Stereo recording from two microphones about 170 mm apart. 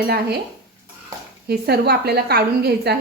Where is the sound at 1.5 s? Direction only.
70° right (ahead or behind).